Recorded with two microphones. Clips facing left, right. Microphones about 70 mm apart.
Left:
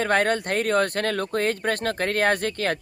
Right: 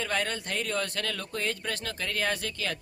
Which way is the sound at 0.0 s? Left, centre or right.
Left.